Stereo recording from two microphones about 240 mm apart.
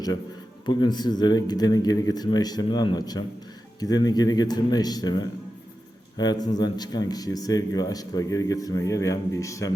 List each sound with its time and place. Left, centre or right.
0.6 s speech: centre